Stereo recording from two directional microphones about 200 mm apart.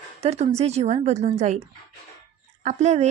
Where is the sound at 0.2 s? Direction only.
30° right (ahead or behind).